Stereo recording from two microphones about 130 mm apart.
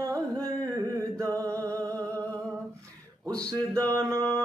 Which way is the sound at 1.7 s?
10° left (ahead or behind).